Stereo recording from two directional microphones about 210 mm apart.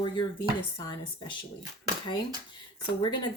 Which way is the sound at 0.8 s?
20° left (ahead or behind).